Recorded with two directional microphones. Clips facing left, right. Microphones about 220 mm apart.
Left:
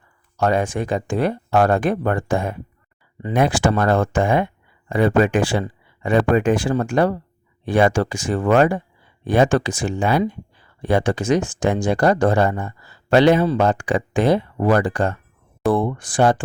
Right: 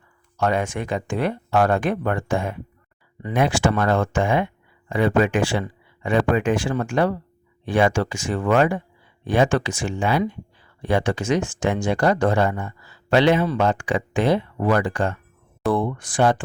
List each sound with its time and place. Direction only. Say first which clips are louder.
0.3 s speech: left 3 dB; 35° left (ahead or behind)